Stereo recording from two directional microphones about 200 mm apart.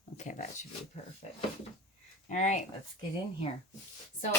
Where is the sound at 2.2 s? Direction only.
35° left (ahead or behind).